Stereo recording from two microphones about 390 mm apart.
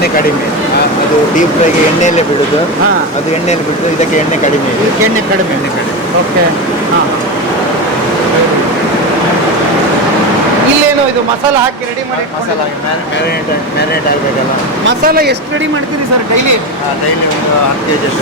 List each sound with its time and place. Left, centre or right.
15.0 s speech: right